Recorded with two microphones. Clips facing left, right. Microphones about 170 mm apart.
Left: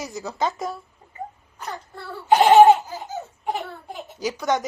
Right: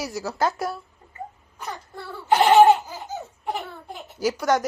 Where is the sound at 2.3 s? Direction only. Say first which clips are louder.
Left 2 dB; 20° left (ahead or behind).